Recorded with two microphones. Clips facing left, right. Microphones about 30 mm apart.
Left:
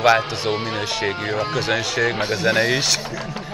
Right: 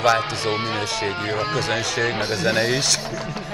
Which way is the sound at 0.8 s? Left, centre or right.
Centre.